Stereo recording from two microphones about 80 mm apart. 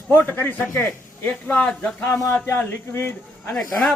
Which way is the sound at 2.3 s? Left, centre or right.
Left.